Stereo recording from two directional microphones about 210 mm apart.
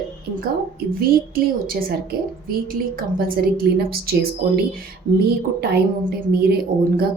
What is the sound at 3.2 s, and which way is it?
A woman's voice, 45° right (ahead or behind).